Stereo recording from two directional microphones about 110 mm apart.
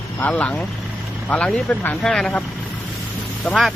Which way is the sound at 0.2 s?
15° left (ahead or behind).